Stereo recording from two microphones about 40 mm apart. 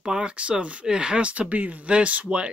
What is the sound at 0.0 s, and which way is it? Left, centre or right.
Speech, right.